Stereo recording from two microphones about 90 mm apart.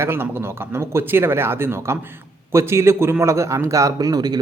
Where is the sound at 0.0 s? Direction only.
25° right (ahead or behind).